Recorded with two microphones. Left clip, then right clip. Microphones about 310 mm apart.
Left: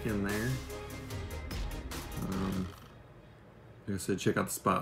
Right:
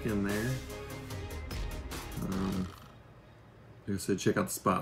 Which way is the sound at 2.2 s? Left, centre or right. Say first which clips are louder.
Right 1 dB; centre.